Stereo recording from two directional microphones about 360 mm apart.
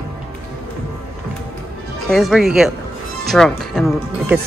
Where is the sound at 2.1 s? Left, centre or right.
Centre.